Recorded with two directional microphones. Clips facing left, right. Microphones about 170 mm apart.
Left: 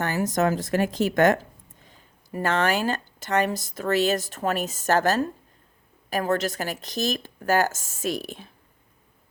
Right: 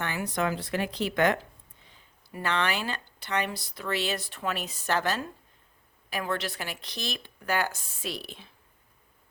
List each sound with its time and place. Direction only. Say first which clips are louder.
0.0 s speech: left 6 dB; 40° left (ahead or behind)